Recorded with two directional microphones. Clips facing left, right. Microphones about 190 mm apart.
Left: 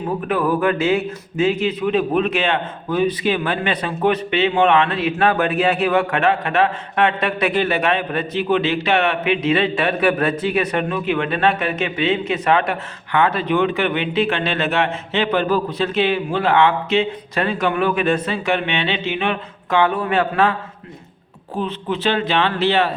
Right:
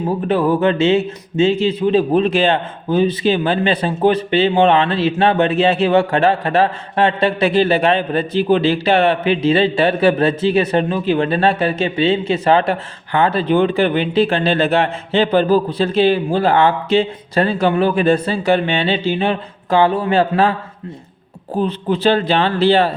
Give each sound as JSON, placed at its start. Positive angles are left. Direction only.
{"t": 0.3, "sound": "a man's voice", "side_deg": -25}
{"t": 21.6, "sound": "a man's voice", "side_deg": -35}